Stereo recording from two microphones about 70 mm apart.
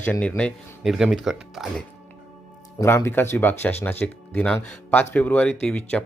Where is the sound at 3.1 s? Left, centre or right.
Left.